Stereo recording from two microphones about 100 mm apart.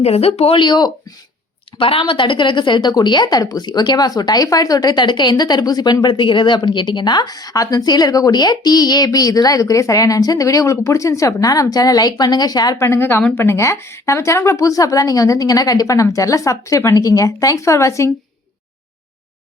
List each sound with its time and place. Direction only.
0.0 s speech: 90° left; by 0.9 s 50° left (ahead or behind)
1.8 s a woman's voice: 65° left (ahead or behind); by 12.7 s 40° left (ahead or behind)
12.7 s a woman's voice: 25° left (ahead or behind)